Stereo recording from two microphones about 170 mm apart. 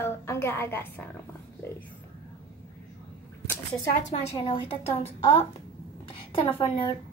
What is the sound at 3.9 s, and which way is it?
A woman's voice, 40° left (ahead or behind).